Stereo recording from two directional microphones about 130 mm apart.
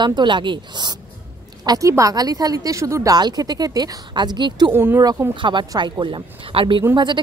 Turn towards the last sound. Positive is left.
turn(degrees=-35)  # may be behind; listen again after turning